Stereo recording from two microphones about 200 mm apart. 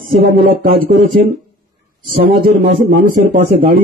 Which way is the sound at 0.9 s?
45° right (ahead or behind).